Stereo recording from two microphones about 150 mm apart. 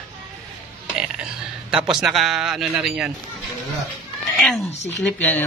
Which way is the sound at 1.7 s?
5° right (ahead or behind).